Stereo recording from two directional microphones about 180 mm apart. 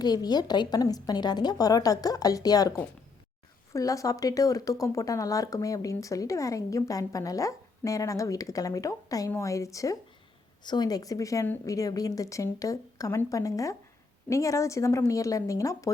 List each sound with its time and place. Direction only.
0.0 s a woman's voice: 20° left (ahead or behind)